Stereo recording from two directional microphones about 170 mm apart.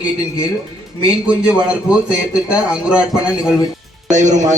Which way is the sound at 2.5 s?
5° right (ahead or behind).